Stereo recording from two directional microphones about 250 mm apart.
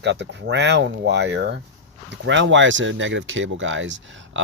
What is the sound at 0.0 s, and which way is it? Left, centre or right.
Speech, right.